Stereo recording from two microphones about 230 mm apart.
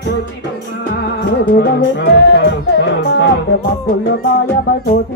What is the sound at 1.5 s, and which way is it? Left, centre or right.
Music, left.